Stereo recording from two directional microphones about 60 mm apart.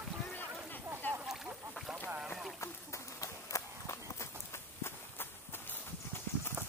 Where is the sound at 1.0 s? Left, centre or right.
Left.